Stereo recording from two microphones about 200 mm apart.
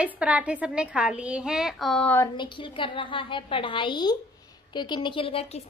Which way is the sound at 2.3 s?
25° left (ahead or behind).